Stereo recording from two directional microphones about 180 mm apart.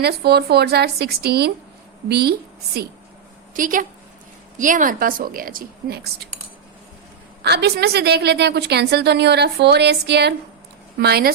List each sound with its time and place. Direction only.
0.0 s a woman's voice: 65° right (ahead or behind)
3.5 s a woman's voice: 50° right (ahead or behind)
7.4 s a woman's voice: 65° right (ahead or behind)